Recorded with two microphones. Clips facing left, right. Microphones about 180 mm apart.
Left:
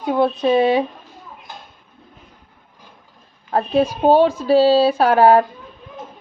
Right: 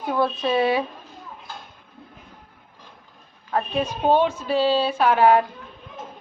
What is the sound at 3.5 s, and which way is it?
Speech, 35° left (ahead or behind).